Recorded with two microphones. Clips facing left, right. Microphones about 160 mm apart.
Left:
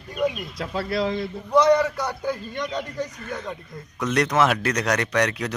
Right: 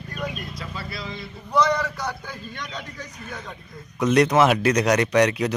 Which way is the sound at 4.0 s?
10° right (ahead or behind).